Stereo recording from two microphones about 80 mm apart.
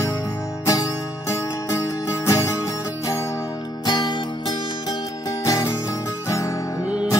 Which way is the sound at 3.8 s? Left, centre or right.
Left.